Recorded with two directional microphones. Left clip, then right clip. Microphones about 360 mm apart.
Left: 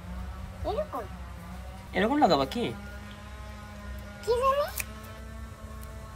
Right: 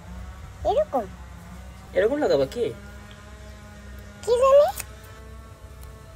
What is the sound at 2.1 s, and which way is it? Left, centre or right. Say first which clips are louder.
Speech: right 2 dB; centre.